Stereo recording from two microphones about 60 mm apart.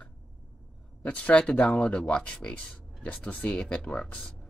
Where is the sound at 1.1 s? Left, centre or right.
Left.